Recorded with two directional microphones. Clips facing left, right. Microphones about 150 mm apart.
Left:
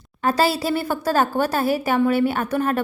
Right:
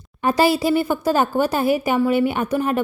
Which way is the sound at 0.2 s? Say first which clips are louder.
Right 3 dB; 15° right (ahead or behind).